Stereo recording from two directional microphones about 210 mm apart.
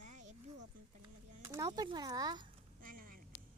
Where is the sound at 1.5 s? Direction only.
20° right (ahead or behind).